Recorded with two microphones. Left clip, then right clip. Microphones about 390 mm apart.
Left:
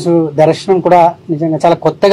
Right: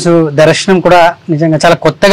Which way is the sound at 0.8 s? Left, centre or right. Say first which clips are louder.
Right 2 dB; right.